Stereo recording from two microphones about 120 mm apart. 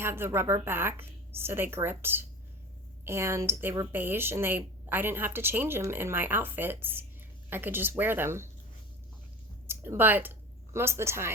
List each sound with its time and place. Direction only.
0.0 s a woman's voice: 20° right (ahead or behind)
9.6 s speech: 20° right (ahead or behind)